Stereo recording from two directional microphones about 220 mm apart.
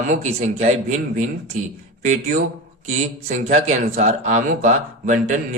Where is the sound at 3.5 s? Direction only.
30° right (ahead or behind).